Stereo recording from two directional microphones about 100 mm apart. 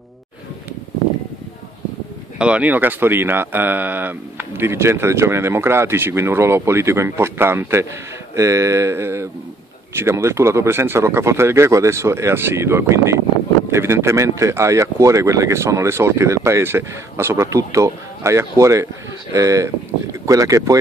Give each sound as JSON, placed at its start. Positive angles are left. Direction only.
{"t": 2.3, "sound": "speech", "side_deg": -10}